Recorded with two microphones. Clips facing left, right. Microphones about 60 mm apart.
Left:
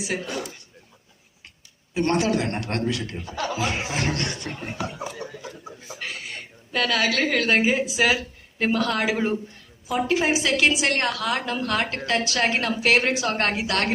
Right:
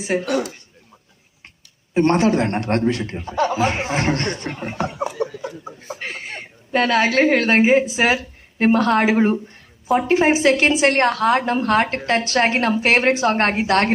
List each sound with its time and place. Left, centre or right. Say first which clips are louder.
0.0 s speech: right 7 dB; right
0.3 s speech: right 10 dB; right
1.9 s speech: right 6 dB; right
4.8 s speech: right 9 dB; right
5.6 s a woman's voice: right 4 dB; right